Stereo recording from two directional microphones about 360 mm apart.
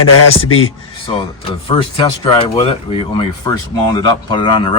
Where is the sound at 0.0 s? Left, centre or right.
Left.